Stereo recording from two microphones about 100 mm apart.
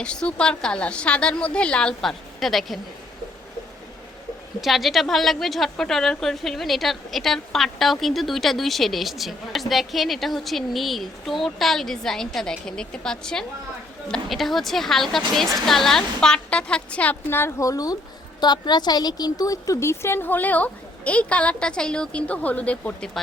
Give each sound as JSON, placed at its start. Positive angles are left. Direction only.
{"t": 0.0, "sound": "a woman's voice", "side_deg": 10}
{"t": 4.6, "sound": "a woman's voice", "side_deg": 0}
{"t": 17.6, "sound": "speech", "side_deg": 35}
{"t": 18.3, "sound": "a woman's voice", "side_deg": 45}